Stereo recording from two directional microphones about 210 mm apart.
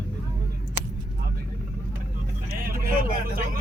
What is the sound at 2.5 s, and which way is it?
Vehicle, 45° right (ahead or behind).